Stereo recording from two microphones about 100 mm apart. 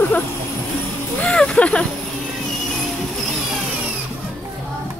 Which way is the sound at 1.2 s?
10° left (ahead or behind).